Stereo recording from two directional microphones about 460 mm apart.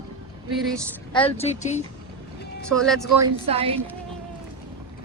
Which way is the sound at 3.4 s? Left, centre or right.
Centre.